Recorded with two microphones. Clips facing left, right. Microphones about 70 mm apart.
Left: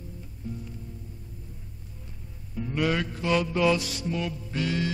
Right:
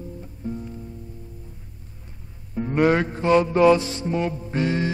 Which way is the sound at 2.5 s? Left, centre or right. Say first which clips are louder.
Right 8 dB; right.